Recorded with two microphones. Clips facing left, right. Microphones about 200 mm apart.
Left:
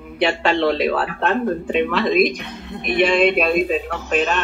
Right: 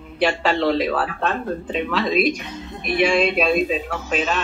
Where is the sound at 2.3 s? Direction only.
60° left (ahead or behind).